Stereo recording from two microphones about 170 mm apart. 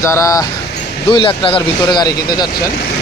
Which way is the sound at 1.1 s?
30° left (ahead or behind).